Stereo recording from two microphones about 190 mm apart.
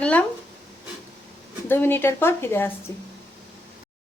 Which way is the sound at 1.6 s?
10° left (ahead or behind).